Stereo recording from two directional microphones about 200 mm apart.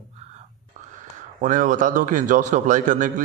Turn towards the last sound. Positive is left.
turn(degrees=-40)  # may be behind; listen again after turning